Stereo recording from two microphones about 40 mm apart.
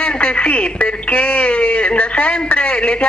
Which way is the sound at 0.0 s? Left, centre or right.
Left.